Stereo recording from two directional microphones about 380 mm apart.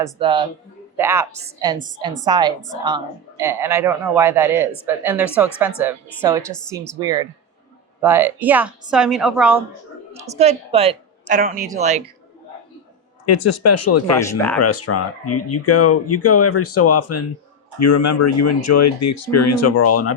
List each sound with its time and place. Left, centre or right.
0.0 s a woman's voice: centre
7.0 s a woman's voice: centre
10.1 s a woman's voice: centre
13.2 s speech: left
14.3 s a woman's voice: centre
14.6 s speech: left